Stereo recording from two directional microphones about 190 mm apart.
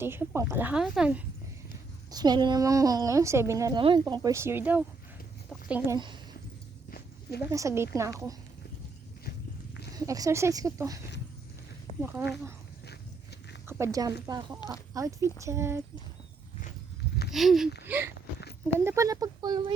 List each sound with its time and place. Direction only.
0.0 s a woman's voice: 10° right (ahead or behind)
2.0 s a woman's voice: 20° right (ahead or behind)
6.9 s a sound: 55° left (ahead or behind)
7.5 s a woman's voice: 15° right (ahead or behind)
9.9 s a woman's voice: 20° right (ahead or behind)
13.7 s a woman's voice: 15° right (ahead or behind)
17.3 s a woman's voice: centre (ahead or behind); by 19.7 s 20° right (ahead or behind)